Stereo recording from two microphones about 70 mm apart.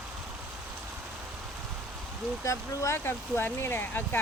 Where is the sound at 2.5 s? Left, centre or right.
Left.